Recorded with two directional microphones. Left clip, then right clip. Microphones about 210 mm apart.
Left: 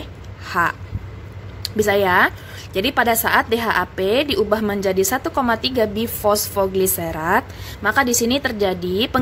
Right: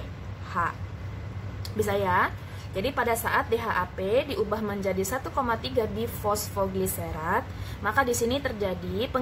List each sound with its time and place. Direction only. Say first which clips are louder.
0.5 s a woman's voice: left 9 dB; 40° left (ahead or behind)